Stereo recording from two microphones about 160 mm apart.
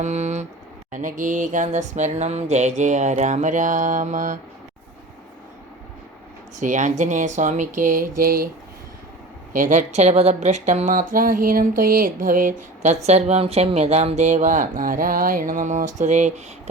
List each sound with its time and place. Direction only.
0.0 s a sound: 45° right (ahead or behind)
0.9 s speech: 55° right (ahead or behind)
6.6 s speech: 50° right (ahead or behind); by 8.4 s 65° right (ahead or behind)
9.6 s speech: 50° right (ahead or behind)